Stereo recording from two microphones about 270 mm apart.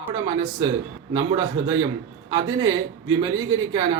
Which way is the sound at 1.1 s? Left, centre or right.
Centre.